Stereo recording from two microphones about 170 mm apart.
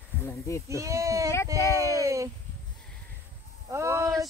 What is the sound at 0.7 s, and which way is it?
Speech, 15° right (ahead or behind).